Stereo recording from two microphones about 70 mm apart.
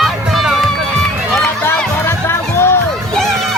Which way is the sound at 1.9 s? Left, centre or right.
Left.